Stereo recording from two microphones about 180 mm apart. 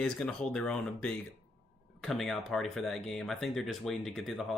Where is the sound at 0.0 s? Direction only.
5° left (ahead or behind).